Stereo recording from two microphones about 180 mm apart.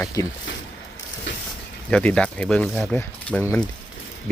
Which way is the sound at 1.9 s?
5° left (ahead or behind).